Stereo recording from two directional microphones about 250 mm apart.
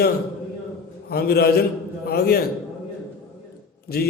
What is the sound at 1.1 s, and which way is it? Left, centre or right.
A man's voice, left.